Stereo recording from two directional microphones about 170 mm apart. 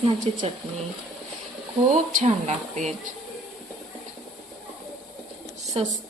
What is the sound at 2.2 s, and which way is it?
Speech, 45° right (ahead or behind).